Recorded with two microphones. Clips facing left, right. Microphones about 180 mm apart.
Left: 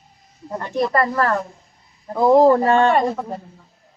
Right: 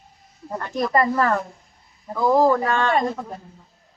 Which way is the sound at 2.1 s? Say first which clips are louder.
Left 5 dB; 25° left (ahead or behind).